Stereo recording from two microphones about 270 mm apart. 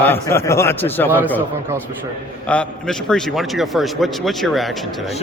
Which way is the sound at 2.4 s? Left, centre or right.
Centre.